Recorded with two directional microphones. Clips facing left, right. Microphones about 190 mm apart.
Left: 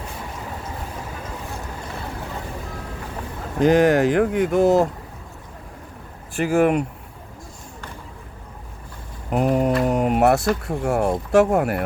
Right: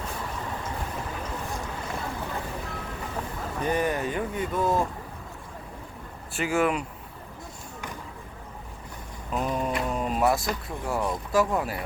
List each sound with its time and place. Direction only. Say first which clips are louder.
3.6 s speech: left 11 dB; 90° left
6.4 s speech: left 7 dB; 55° left (ahead or behind)
9.3 s speech: left 9 dB; 70° left (ahead or behind)